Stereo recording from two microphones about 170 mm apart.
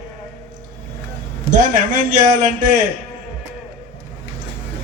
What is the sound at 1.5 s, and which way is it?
A man's voice, 55° right (ahead or behind).